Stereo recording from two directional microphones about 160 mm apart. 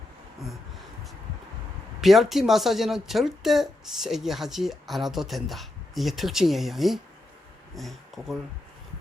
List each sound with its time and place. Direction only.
2.0 s a woman's voice: centre (ahead or behind)